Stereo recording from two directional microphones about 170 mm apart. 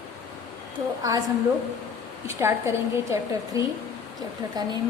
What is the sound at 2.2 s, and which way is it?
A woman's voice, 15° right (ahead or behind).